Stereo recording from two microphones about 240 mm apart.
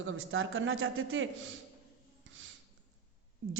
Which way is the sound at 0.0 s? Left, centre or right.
Right.